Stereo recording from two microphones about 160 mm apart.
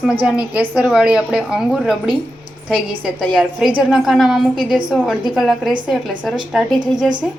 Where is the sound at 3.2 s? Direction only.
5° right (ahead or behind).